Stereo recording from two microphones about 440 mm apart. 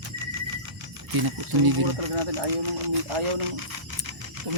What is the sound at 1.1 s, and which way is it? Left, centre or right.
Speech, right.